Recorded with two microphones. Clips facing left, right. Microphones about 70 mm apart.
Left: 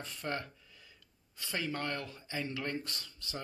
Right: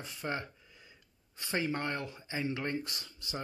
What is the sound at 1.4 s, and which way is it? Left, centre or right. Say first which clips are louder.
Speech: right 3 dB; right.